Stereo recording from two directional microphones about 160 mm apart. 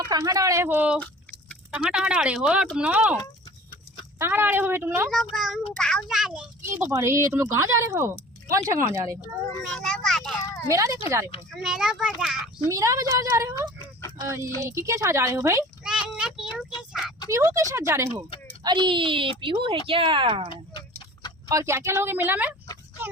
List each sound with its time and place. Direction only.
0.0 s speech: 25° right (ahead or behind); by 3.2 s 5° right (ahead or behind)
4.2 s speech: 15° right (ahead or behind)
5.1 s a child's voice: centre (ahead or behind)
6.6 s speech: 15° right (ahead or behind)
9.7 s a sound: 5° left (ahead or behind)
10.7 s speech: 20° right (ahead or behind)
11.5 s a child's voice: 5° right (ahead or behind)
12.6 s speech: 20° right (ahead or behind)
15.8 s child singing: 5° right (ahead or behind)
16.9 s a sound: centre (ahead or behind)
17.3 s speech: 20° right (ahead or behind)
18.6 s speech: 30° right (ahead or behind)
21.5 s speech: 20° right (ahead or behind)